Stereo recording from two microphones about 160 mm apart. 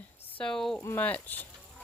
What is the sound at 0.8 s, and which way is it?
Speech, 15° left (ahead or behind).